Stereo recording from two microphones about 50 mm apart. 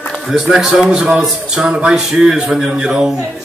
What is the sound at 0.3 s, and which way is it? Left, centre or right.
A man's voice, centre.